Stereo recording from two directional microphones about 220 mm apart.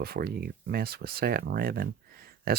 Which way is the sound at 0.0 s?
45° right (ahead or behind).